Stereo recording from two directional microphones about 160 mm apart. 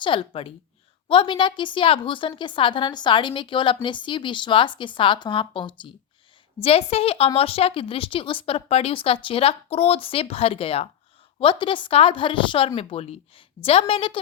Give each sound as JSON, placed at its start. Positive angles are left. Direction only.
{"t": 0.0, "sound": "speech", "side_deg": 35}